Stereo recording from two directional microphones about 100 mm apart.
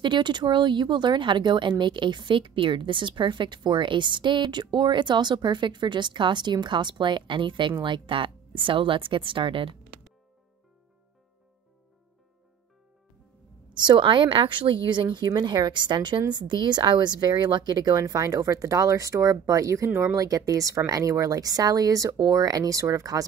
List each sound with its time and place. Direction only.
0.0 s a woman's voice: 50° right (ahead or behind)
13.8 s speech: 50° right (ahead or behind); by 23.2 s 35° right (ahead or behind)